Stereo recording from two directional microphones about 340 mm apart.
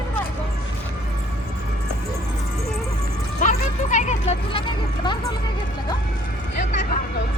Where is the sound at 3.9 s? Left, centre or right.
Left.